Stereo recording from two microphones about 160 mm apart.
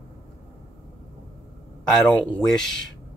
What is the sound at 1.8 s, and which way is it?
Speech, 5° left (ahead or behind).